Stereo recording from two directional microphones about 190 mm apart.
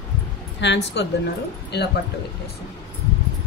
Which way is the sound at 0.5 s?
65° left (ahead or behind).